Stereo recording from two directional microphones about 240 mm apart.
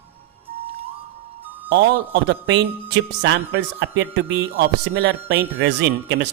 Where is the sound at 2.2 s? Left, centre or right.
Right.